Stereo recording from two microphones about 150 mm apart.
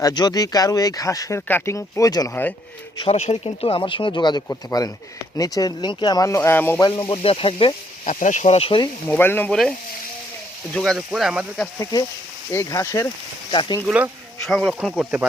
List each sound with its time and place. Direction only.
0.0 s speech: 25° left (ahead or behind)
2.3 s speech: 10° left (ahead or behind)
3.0 s speech: 45° left (ahead or behind); by 6.8 s 15° left (ahead or behind)
7.1 s speech: 35° left (ahead or behind)
8.0 s speech: 55° left (ahead or behind); by 8.9 s 35° left (ahead or behind)
9.0 s speech: 15° left (ahead or behind)
10.8 s speech: centre (ahead or behind)
11.8 s speech: 25° left (ahead or behind)
13.5 s speech: 30° left (ahead or behind)
13.8 s speech: 10° right (ahead or behind)